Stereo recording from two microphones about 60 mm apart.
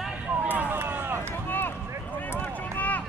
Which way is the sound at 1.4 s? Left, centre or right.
Left.